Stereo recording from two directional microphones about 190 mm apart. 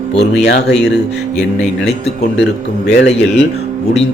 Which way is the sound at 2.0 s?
65° left (ahead or behind).